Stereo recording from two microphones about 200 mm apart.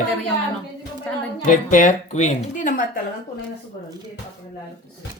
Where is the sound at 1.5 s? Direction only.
40° left (ahead or behind).